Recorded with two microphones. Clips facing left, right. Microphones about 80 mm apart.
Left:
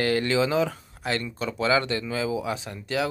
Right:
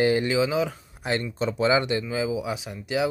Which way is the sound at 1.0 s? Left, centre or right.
Right.